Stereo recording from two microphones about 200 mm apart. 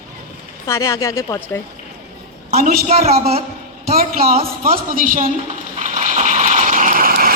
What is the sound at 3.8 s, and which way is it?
A woman's voice, 45° right (ahead or behind).